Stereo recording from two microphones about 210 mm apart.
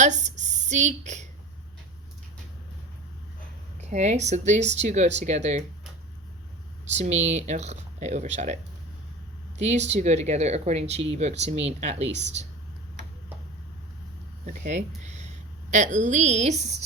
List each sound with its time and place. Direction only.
0.0 s a woman's voice: 35° right (ahead or behind)
3.8 s speech: 35° right (ahead or behind)
6.9 s speech: 35° right (ahead or behind)
9.6 s speech: 35° right (ahead or behind)
14.4 s speech: 35° right (ahead or behind)
15.0 s a sound: 35° right (ahead or behind)
15.7 s speech: 35° right (ahead or behind)